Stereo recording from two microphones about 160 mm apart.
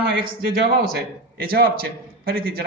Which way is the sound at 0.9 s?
70° right (ahead or behind).